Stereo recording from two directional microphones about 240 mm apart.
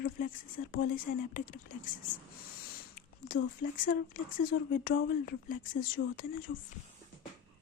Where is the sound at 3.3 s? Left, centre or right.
Left.